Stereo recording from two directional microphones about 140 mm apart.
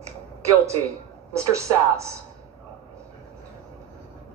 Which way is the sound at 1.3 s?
20° right (ahead or behind).